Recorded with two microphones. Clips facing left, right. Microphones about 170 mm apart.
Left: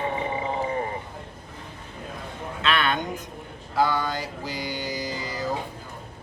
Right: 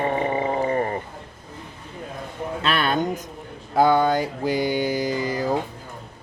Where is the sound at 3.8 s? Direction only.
55° right (ahead or behind).